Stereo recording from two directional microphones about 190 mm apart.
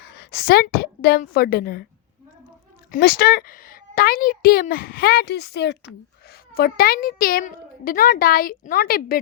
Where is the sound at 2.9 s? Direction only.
55° left (ahead or behind).